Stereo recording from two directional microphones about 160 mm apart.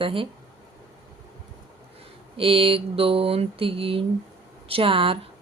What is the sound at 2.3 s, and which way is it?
Speech, 35° right (ahead or behind).